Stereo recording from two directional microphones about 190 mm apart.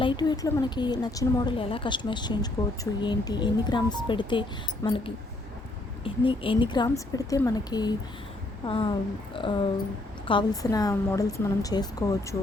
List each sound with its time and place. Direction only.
0.0 s a woman's voice: 25° left (ahead or behind)
6.2 s a woman's voice: 25° left (ahead or behind)